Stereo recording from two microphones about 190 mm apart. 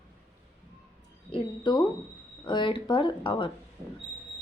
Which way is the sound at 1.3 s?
25° left (ahead or behind).